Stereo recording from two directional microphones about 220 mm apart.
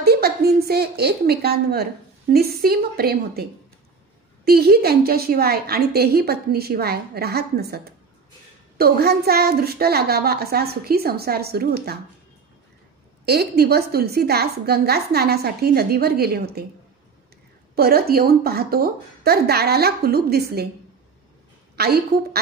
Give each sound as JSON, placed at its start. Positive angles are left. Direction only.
{"t": 0.0, "sound": "a woman's voice", "side_deg": -45}
{"t": 4.5, "sound": "a woman's voice", "side_deg": -45}
{"t": 13.2, "sound": "a woman's voice", "side_deg": -45}
{"t": 17.7, "sound": "a woman's voice", "side_deg": -45}
{"t": 21.7, "sound": "a woman's voice", "side_deg": -45}